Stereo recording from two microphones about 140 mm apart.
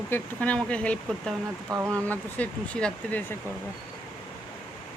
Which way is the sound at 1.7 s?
20° right (ahead or behind).